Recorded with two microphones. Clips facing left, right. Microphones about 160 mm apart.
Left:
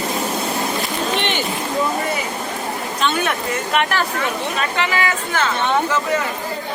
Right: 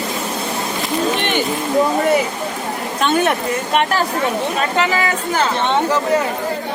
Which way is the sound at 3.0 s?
45° right (ahead or behind).